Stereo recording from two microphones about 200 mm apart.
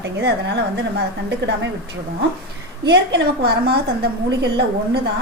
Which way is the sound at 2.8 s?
60° right (ahead or behind).